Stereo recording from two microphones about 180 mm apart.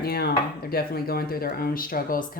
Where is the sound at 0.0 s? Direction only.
60° left (ahead or behind).